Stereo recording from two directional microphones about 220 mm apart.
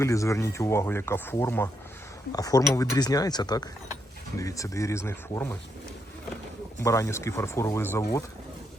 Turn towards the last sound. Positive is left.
turn(degrees=10)  # may be behind; listen again after turning